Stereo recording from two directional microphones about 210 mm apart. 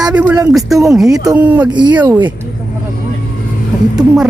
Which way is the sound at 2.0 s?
20° right (ahead or behind).